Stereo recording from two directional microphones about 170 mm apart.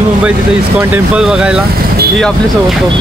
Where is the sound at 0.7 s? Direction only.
10° right (ahead or behind).